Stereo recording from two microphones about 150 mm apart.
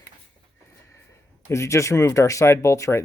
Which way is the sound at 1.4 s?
20° left (ahead or behind).